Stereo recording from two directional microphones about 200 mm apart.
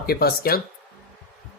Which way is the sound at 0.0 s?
50° left (ahead or behind).